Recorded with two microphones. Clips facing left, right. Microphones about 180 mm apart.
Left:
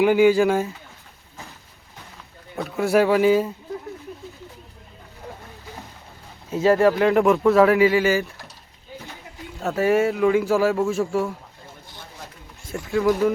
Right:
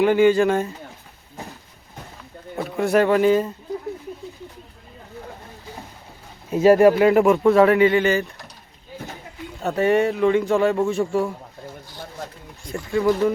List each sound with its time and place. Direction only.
0.0 s speech: 10° left (ahead or behind)
2.6 s a man's voice: centre (ahead or behind)
6.5 s speech: 15° right (ahead or behind)
7.0 s a man's voice: centre (ahead or behind)
9.6 s a man's voice: centre (ahead or behind)
12.6 s a man's voice: centre (ahead or behind)